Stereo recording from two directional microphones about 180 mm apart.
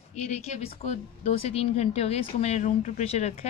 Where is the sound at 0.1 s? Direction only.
40° left (ahead or behind).